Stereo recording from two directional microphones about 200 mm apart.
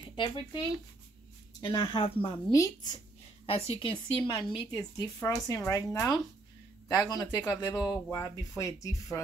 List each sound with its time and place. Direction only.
0.1 s speech: 25° left (ahead or behind)
1.6 s a woman's voice: 25° left (ahead or behind)
2.5 s speech: 15° left (ahead or behind)
3.4 s a woman's voice: 30° left (ahead or behind)
6.9 s a woman's voice: 15° left (ahead or behind)